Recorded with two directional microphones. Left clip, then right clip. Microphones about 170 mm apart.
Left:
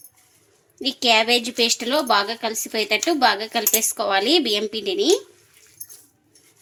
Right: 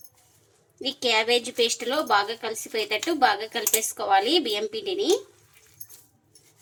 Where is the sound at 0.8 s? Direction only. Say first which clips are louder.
Left 6 dB; 45° left (ahead or behind).